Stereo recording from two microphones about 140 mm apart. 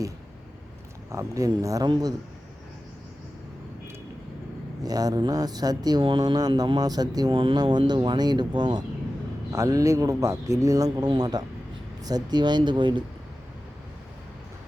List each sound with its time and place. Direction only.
1.1 s speech: 25° right (ahead or behind)
4.8 s speech: 25° right (ahead or behind)